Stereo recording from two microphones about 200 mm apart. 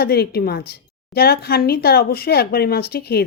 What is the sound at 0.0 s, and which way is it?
Speech, 50° left (ahead or behind).